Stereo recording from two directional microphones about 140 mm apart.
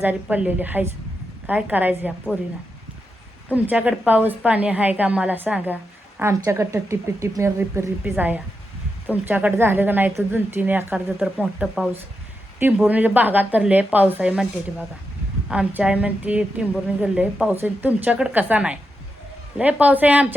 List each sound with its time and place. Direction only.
0.0 s a woman's voice: 10° right (ahead or behind)
3.5 s a woman's voice: 10° right (ahead or behind)